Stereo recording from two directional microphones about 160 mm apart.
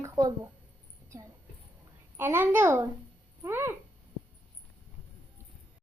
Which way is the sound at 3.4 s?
15° right (ahead or behind).